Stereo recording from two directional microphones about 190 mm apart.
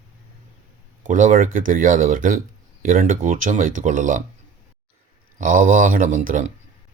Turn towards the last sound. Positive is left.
turn(degrees=-45)  # may be behind; listen again after turning